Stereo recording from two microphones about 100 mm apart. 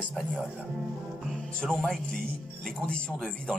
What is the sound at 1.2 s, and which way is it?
Music, 5° left (ahead or behind).